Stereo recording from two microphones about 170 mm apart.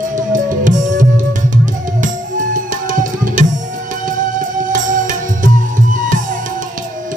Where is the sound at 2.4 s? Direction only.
50° right (ahead or behind).